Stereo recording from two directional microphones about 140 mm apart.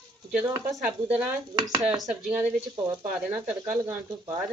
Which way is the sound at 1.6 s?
35° right (ahead or behind).